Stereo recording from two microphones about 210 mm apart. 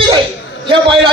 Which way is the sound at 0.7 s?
25° right (ahead or behind).